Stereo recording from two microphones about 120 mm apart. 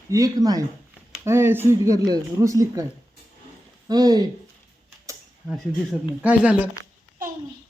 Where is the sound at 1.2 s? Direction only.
20° right (ahead or behind).